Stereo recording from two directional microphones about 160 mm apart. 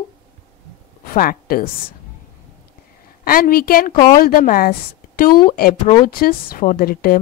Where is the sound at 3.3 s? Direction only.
65° left (ahead or behind).